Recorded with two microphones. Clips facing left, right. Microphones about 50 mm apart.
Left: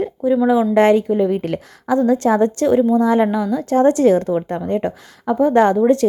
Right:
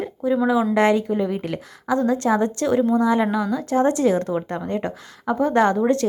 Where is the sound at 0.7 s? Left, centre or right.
Left.